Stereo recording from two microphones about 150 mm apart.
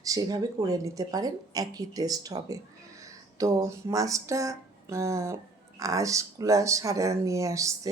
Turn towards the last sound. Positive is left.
turn(degrees=-20)  # may be behind; listen again after turning